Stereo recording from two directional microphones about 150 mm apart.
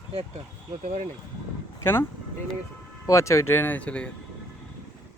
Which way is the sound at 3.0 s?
20° left (ahead or behind).